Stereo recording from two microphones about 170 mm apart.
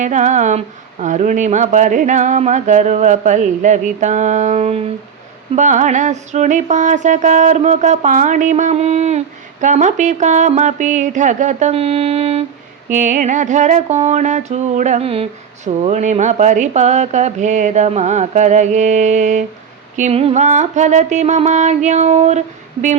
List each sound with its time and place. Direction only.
0.0 s music: 45° right (ahead or behind)
12.9 s music: 45° right (ahead or behind)